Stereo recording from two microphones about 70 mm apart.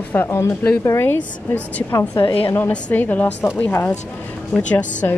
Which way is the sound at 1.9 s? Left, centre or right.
Left.